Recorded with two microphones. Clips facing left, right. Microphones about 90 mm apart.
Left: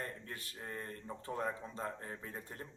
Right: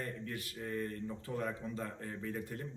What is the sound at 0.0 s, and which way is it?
A man's voice, 35° left (ahead or behind).